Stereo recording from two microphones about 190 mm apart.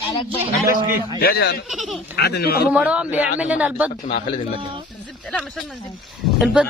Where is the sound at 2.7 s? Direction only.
5° right (ahead or behind).